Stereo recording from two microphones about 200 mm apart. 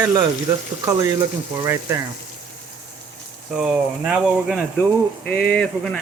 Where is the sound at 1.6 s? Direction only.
15° right (ahead or behind).